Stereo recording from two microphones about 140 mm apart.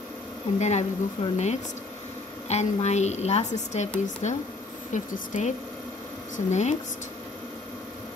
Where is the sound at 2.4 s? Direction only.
55° left (ahead or behind).